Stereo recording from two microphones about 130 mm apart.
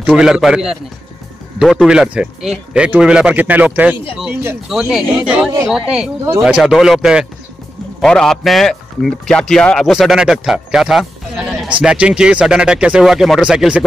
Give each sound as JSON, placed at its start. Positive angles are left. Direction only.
{"t": 0.0, "sound": "a man's voice", "side_deg": -5}
{"t": 1.6, "sound": "a man's voice", "side_deg": -5}
{"t": 4.6, "sound": "a man's voice", "side_deg": 0}
{"t": 8.0, "sound": "a man's voice", "side_deg": 5}